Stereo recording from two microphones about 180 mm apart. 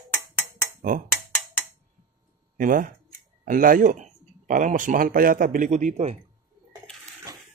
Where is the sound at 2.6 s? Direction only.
50° right (ahead or behind).